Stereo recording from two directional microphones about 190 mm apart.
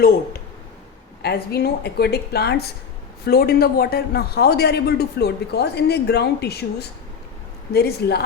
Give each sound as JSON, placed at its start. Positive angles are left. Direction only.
{"t": 1.2, "sound": "a man's voice", "side_deg": 55}